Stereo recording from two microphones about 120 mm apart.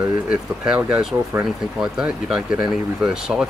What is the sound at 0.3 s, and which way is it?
Speech, 10° right (ahead or behind).